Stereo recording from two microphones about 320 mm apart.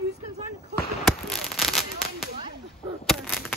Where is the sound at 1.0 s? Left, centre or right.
Centre.